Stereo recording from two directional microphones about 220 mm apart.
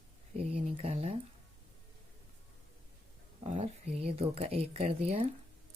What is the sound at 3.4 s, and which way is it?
Speech, 30° right (ahead or behind).